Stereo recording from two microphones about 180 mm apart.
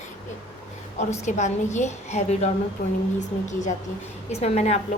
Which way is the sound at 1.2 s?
40° left (ahead or behind).